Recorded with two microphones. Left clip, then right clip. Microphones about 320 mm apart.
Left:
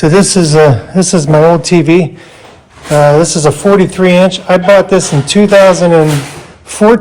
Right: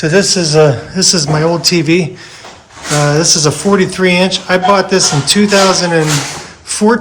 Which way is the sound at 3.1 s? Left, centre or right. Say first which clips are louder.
Left 3 dB; centre.